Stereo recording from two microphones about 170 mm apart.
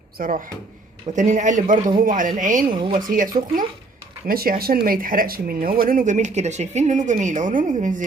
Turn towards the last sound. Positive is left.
turn(degrees=-50)  # may be behind; listen again after turning